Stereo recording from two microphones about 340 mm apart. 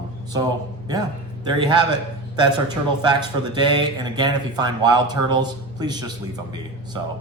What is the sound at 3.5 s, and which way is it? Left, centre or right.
Speech, centre.